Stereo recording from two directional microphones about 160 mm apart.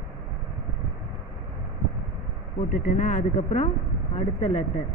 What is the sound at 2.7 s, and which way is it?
Speech, 55° left (ahead or behind).